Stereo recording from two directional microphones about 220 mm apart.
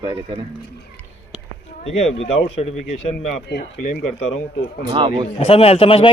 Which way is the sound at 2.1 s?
55° left (ahead or behind).